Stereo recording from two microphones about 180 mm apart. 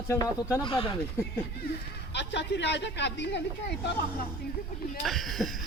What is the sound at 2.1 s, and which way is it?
Speech, 75° left (ahead or behind).